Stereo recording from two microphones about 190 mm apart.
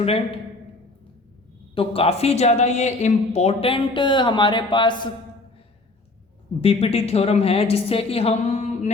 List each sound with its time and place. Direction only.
0.0 s a woman's voice: 30° left (ahead or behind)
1.7 s speech: 30° left (ahead or behind)
6.6 s a woman's voice: 30° left (ahead or behind)